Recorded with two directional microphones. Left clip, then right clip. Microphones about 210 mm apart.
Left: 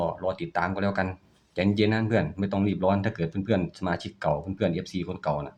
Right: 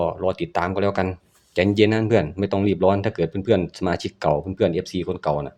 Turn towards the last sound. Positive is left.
turn(degrees=-30)  # may be behind; listen again after turning